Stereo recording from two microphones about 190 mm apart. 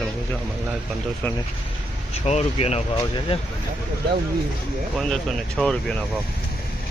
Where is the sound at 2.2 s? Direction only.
35° left (ahead or behind).